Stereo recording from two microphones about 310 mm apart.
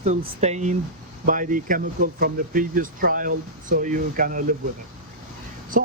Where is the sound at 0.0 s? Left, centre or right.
Right.